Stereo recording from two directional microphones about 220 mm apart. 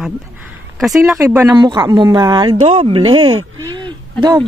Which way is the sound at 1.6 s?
20° right (ahead or behind).